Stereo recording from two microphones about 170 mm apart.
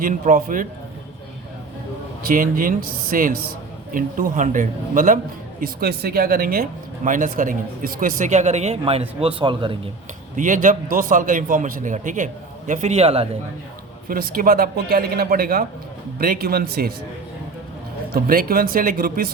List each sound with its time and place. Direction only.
0.0 s a man's voice: 55° right (ahead or behind)
2.2 s a man's voice: 55° right (ahead or behind); by 9.7 s 30° right (ahead or behind)
10.3 s a man's voice: 50° right (ahead or behind)
14.1 s a man's voice: 55° right (ahead or behind)
18.1 s a man's voice: 60° right (ahead or behind)